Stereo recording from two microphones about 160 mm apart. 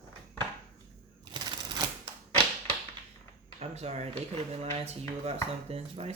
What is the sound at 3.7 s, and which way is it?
Speech, 45° right (ahead or behind).